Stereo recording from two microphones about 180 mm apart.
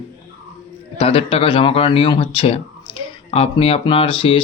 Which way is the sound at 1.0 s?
30° left (ahead or behind).